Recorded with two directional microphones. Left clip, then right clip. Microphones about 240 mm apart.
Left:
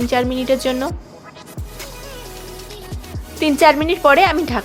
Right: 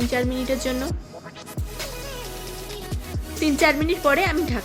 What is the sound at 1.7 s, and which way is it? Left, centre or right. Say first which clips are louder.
Music: right 1 dB; centre.